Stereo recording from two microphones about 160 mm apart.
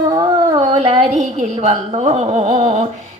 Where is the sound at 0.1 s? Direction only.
30° right (ahead or behind).